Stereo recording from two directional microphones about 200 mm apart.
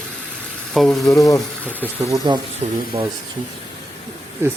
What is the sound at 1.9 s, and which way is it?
Speech, 20° right (ahead or behind).